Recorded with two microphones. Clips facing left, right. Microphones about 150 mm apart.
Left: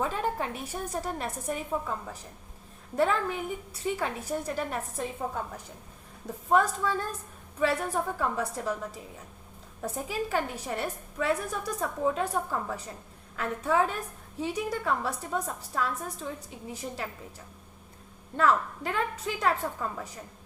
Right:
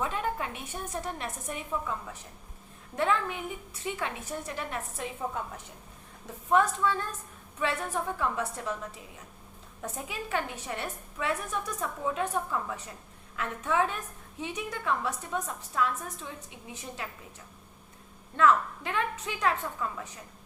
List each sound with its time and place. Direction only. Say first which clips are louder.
0.0 s a woman's voice: left 2 dB; 35° left (ahead or behind)
6.5 s a woman's voice: even; 40° left (ahead or behind)
9.8 s a woman's voice: left 5 dB; 35° left (ahead or behind)
18.3 s a woman's voice: right 1 dB; 40° left (ahead or behind)